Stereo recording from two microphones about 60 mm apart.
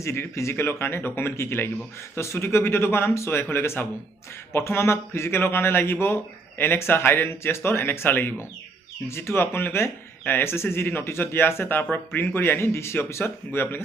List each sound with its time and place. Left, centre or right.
0.0 s speech: left
9.0 s speech: left